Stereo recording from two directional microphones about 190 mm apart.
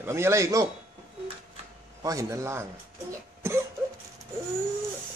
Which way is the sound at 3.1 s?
15° right (ahead or behind).